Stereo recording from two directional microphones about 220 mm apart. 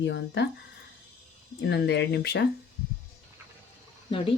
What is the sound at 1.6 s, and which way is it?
Speech, 50° left (ahead or behind).